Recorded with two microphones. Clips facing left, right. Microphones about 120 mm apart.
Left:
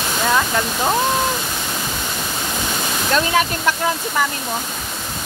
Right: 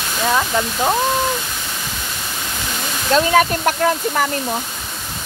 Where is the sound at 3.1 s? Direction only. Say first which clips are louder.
Right 5 dB; 45° right (ahead or behind).